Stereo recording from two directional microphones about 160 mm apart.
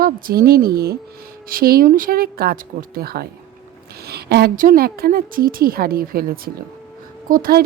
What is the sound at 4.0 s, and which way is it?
A woman's voice, 85° right.